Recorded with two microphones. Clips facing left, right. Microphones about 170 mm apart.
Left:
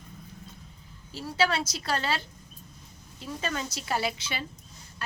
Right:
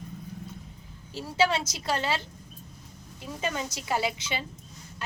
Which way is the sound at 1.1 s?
20° right (ahead or behind).